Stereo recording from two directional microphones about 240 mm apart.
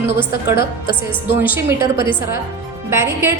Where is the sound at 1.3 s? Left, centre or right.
Centre.